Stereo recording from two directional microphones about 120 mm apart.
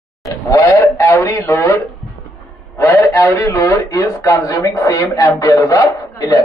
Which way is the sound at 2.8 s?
25° left (ahead or behind).